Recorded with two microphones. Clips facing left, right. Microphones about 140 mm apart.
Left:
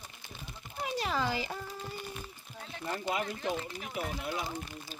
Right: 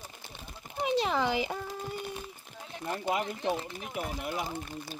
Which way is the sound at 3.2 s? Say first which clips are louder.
Right 2 dB; 20° right (ahead or behind).